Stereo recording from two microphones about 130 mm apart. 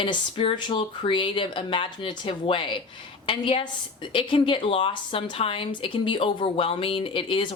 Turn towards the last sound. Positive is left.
turn(degrees=40)  # may be behind; listen again after turning